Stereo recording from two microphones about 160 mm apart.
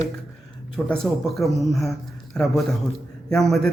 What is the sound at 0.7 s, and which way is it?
Speech, centre (ahead or behind).